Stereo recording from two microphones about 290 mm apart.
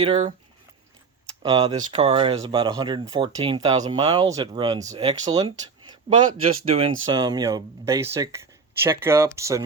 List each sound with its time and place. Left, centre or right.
0.0 s speech: centre
1.4 s speech: centre
6.7 s speech: centre